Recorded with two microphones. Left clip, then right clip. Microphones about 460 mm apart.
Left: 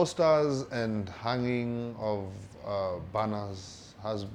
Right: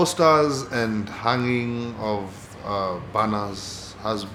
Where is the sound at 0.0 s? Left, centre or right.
Left.